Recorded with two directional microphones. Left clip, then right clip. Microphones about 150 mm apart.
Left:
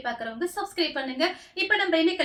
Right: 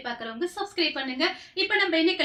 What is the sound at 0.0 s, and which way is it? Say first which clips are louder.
A woman's voice: left 1 dB; 20° left (ahead or behind).